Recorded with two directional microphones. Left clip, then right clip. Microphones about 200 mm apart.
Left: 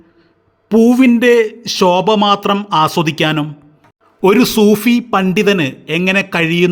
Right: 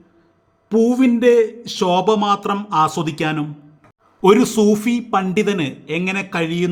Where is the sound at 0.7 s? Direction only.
30° left (ahead or behind).